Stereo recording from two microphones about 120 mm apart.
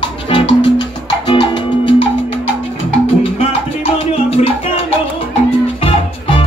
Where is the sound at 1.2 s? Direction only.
40° left (ahead or behind).